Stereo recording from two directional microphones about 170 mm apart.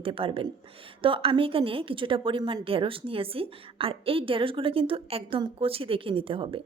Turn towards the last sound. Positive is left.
turn(degrees=-30)  # may be behind; listen again after turning